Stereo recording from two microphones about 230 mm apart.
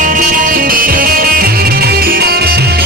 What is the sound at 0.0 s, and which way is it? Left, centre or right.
Music, right.